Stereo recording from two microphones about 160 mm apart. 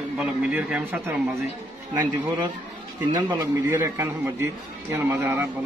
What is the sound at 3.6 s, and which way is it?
Speech, 20° right (ahead or behind).